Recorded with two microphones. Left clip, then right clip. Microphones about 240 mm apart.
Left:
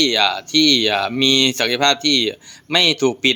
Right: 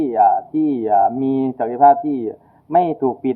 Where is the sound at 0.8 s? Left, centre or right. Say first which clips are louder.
Right 1 dB; left.